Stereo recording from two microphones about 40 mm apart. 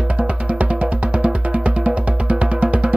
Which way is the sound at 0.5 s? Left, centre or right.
Right.